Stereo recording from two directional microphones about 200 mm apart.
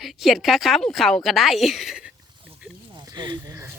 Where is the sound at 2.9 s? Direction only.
20° right (ahead or behind).